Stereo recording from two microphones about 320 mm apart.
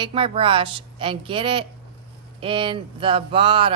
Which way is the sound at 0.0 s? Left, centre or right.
Centre.